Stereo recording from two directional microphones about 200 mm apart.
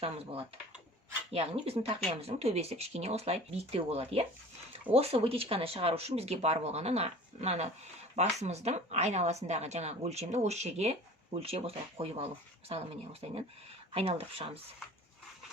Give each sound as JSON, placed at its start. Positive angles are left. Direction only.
{"t": 0.0, "sound": "speech", "side_deg": -30}
{"t": 13.9, "sound": "speech", "side_deg": -30}